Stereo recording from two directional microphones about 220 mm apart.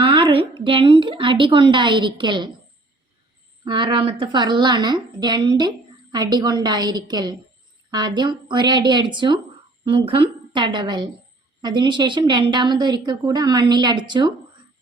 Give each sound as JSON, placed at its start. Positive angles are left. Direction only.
{"t": 0.0, "sound": "a woman's voice", "side_deg": -25}
{"t": 3.6, "sound": "a woman's voice", "side_deg": -20}